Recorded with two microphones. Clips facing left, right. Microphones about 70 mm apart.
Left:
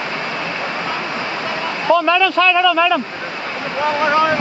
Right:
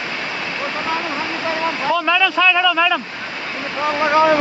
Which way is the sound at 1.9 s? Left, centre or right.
Centre.